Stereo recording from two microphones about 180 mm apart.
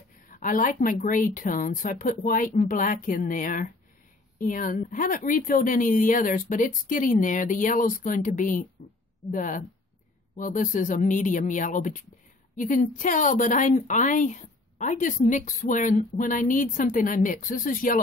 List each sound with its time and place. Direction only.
0.3 s a woman's voice: 50° left (ahead or behind)